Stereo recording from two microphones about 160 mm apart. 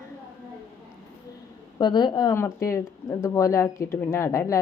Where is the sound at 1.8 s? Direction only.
25° left (ahead or behind).